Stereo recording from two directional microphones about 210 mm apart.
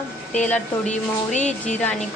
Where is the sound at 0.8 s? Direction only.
35° left (ahead or behind).